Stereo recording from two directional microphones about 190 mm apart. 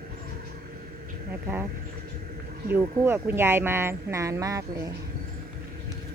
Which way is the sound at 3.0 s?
10° right (ahead or behind).